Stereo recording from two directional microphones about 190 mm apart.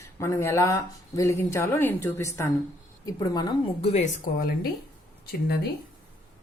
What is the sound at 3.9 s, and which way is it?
Speech, 35° left (ahead or behind).